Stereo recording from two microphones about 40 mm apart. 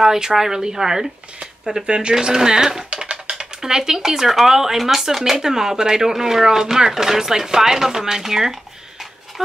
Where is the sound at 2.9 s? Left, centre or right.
Right.